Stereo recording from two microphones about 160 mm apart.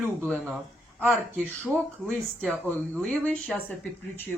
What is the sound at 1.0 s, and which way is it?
A woman's voice, 5° left (ahead or behind).